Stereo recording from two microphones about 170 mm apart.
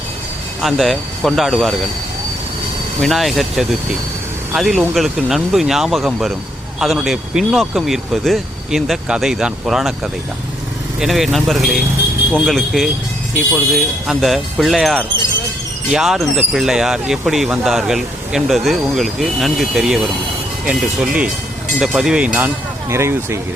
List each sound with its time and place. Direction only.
0.6 s speech: centre (ahead or behind)
3.0 s speech: centre (ahead or behind); by 23.4 s 15° right (ahead or behind)